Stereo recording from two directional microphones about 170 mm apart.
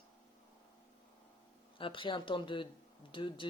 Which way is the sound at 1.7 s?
30° left (ahead or behind).